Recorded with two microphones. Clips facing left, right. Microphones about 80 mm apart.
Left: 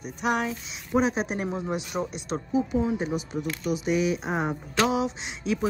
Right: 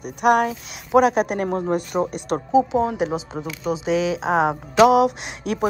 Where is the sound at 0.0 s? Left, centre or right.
Right.